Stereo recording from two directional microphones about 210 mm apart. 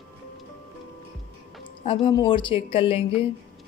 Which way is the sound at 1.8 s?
25° left (ahead or behind).